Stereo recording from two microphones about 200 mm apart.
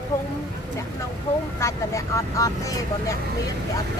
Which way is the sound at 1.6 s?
15° left (ahead or behind).